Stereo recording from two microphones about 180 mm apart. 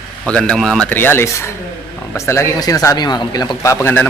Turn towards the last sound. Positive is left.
turn(degrees=15)  # may be behind; listen again after turning